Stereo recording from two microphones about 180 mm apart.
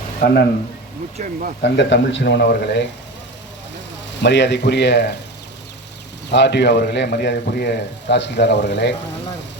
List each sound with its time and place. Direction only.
1.2 s speech: 50° right (ahead or behind)
1.6 s a man's voice: 75° left (ahead or behind)
4.2 s a man's voice: 75° left (ahead or behind)
6.3 s a man's voice: 70° left (ahead or behind)